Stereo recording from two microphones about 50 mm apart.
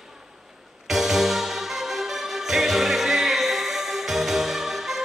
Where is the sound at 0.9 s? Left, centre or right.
Centre.